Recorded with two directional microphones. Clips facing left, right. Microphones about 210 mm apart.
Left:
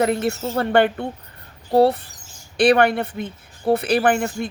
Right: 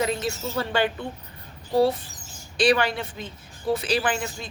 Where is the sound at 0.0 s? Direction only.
60° left (ahead or behind).